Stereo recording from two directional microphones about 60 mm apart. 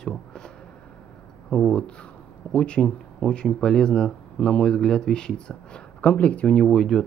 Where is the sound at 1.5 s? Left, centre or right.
Centre.